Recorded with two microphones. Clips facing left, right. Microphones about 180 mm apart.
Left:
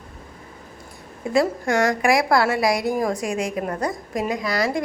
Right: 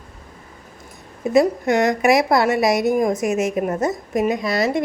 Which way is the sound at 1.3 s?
20° right (ahead or behind).